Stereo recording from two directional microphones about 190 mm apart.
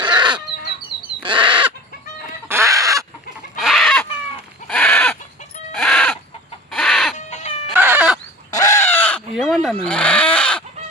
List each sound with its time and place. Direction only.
0.0 s chicken: 25° right (ahead or behind)
1.2 s bird: 25° right (ahead or behind)
2.5 s fowl: 15° right (ahead or behind)
3.6 s chicken: centre (ahead or behind)
4.7 s goat: 5° left (ahead or behind)
5.7 s chicken: 5° left (ahead or behind)
7.2 s chicken: 35° left (ahead or behind)
7.7 s cat: 10° right (ahead or behind)
8.4 s fowl: 20° left (ahead or behind)
9.3 s chicken: centre (ahead or behind)